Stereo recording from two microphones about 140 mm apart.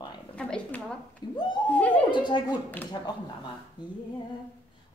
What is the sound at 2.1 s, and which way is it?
A woman's voice, 35° left (ahead or behind).